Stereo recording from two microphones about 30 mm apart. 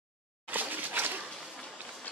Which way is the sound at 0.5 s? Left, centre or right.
Right.